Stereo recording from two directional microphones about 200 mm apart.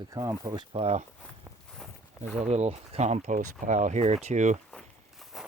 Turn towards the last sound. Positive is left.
turn(degrees=0)  # may be behind; listen again after turning